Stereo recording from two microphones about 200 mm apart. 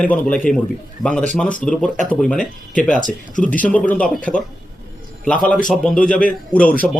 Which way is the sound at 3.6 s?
5° left (ahead or behind).